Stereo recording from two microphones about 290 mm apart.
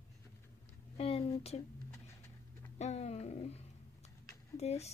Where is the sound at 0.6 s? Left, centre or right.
Left.